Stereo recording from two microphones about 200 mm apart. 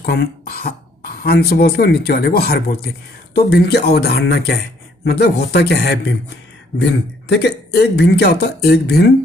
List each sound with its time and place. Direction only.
0.0 s speech: 50° left (ahead or behind)